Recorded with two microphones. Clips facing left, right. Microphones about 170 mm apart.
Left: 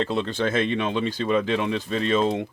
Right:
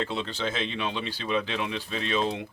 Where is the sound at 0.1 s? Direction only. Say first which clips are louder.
Left 7 dB; 50° left (ahead or behind).